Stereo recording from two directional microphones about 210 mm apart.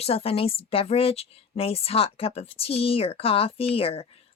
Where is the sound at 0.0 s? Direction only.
30° left (ahead or behind).